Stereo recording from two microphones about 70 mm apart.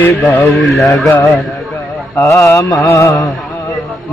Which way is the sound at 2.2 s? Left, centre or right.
Left.